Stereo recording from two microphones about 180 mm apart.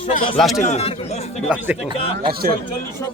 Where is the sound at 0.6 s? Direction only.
35° left (ahead or behind).